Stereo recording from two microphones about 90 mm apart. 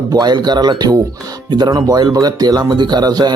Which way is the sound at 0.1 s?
50° right (ahead or behind).